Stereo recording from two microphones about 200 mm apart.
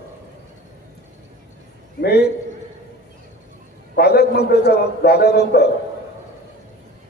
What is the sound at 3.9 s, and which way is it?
A man's voice, 55° left (ahead or behind).